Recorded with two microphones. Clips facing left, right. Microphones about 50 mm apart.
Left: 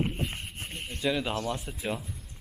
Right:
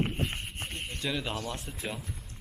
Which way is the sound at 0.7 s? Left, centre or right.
Centre.